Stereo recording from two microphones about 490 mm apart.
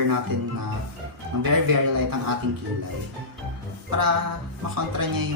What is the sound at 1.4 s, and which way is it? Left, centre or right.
Speech, right.